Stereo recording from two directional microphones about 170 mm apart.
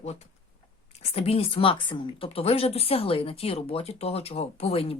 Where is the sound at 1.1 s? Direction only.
35° left (ahead or behind).